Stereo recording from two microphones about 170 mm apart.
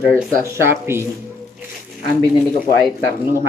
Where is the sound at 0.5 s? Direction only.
15° right (ahead or behind).